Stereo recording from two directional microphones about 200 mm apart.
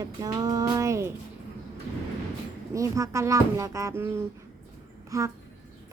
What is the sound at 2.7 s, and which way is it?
Speech, 15° right (ahead or behind).